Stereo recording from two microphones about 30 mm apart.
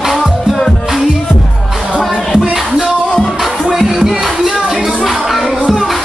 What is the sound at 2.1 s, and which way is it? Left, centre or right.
Music, centre.